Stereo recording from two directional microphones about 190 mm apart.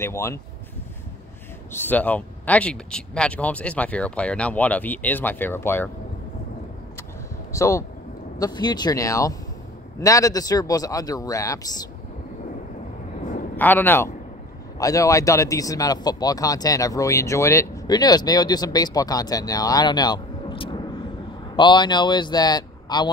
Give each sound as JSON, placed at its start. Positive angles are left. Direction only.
{"t": 0.0, "sound": "speech", "side_deg": 15}
{"t": 1.7, "sound": "speech", "side_deg": 10}
{"t": 7.5, "sound": "speech", "side_deg": 15}
{"t": 13.6, "sound": "speech", "side_deg": 10}